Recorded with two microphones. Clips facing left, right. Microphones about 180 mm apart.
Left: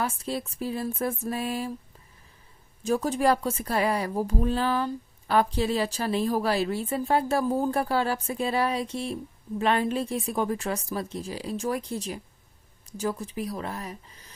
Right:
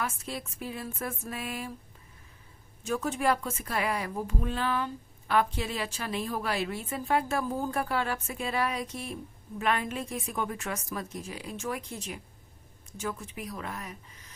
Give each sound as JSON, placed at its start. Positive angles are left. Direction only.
{"t": 0.0, "sound": "a woman's voice", "side_deg": 30}
{"t": 2.8, "sound": "a woman's voice", "side_deg": 35}